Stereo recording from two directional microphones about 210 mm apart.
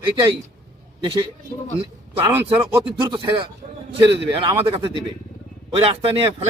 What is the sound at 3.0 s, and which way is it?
Speech, 20° right (ahead or behind).